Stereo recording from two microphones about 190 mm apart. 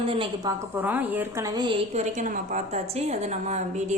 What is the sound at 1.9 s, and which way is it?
A woman's voice, 40° right (ahead or behind).